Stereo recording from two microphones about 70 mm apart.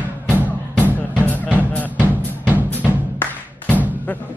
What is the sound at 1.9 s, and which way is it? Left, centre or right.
Drum, right.